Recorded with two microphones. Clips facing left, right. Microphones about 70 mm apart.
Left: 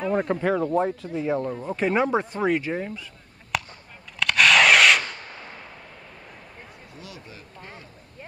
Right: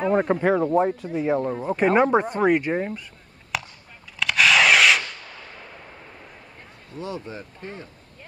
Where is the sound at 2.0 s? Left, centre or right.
Centre.